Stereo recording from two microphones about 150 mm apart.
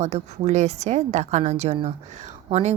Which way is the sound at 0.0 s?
50° right (ahead or behind).